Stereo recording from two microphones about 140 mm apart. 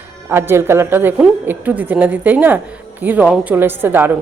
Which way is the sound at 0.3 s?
20° right (ahead or behind).